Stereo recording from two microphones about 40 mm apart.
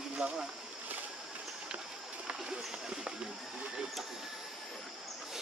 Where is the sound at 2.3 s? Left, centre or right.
Centre.